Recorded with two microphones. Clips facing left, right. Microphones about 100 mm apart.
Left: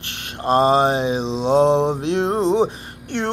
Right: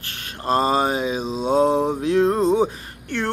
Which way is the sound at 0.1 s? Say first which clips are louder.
Left 3 dB; 25° left (ahead or behind).